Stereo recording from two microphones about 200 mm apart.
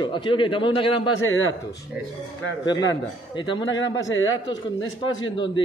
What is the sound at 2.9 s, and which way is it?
A man's voice, 20° left (ahead or behind).